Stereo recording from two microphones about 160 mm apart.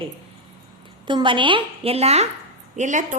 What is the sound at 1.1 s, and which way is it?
A woman's voice, 30° right (ahead or behind).